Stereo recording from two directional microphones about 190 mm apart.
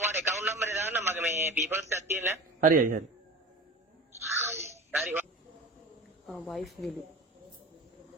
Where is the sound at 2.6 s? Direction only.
45° right (ahead or behind).